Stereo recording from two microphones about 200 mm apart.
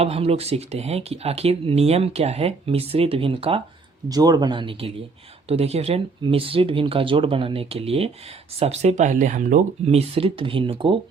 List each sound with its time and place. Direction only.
0.0 s speech: 30° right (ahead or behind)